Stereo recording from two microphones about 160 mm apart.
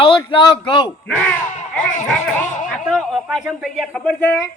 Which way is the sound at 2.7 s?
Centre (ahead or behind).